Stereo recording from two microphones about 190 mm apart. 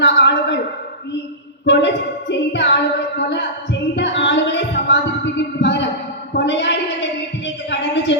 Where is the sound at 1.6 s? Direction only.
65° left (ahead or behind).